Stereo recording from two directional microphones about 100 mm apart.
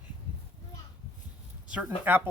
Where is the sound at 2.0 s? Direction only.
20° right (ahead or behind).